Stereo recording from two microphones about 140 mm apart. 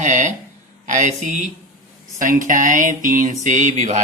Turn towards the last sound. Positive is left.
turn(degrees=-55)  # may be behind; listen again after turning